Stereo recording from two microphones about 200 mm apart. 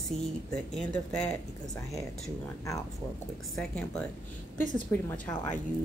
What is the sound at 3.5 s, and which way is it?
Speech, 5° left (ahead or behind).